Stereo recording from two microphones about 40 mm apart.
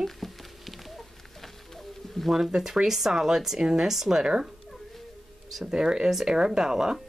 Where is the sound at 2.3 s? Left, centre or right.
Centre.